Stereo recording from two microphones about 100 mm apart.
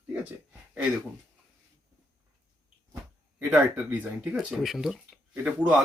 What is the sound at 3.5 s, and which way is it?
Speech, 10° right (ahead or behind).